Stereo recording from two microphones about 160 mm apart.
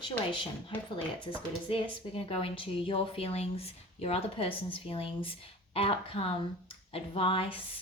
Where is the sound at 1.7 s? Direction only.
35° left (ahead or behind).